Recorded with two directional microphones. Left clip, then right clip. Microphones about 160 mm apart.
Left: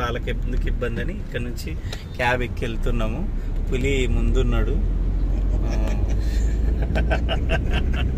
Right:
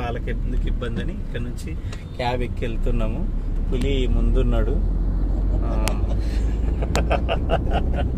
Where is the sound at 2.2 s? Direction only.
10° left (ahead or behind).